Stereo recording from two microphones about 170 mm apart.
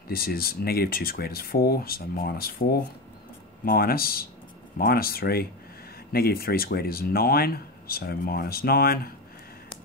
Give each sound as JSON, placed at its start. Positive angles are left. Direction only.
{"t": 0.1, "sound": "speech", "side_deg": 60}